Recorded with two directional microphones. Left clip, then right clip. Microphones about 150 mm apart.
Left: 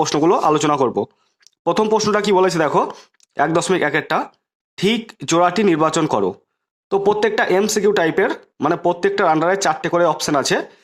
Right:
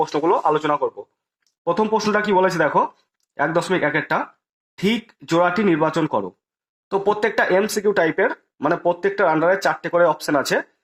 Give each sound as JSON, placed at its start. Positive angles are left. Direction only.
{"t": 0.2, "sound": "speech", "side_deg": 40}
{"t": 6.8, "sound": "speech", "side_deg": 35}